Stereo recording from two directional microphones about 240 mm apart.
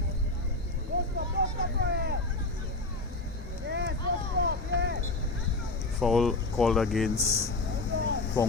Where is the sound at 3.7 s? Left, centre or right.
Right.